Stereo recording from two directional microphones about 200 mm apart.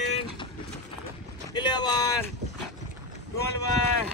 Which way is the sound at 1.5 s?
20° left (ahead or behind).